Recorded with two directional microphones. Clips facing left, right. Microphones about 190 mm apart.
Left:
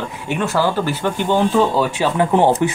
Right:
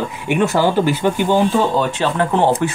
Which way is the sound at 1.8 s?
10° left (ahead or behind).